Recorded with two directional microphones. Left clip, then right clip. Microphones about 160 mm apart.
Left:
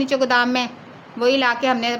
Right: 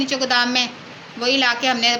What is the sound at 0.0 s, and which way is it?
A woman's voice, 80° left.